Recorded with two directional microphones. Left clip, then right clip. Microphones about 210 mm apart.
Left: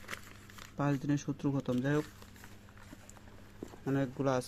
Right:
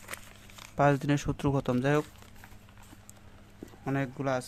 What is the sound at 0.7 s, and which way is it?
Speech, 30° right (ahead or behind).